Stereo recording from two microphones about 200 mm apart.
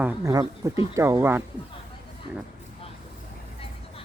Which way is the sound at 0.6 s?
15° right (ahead or behind).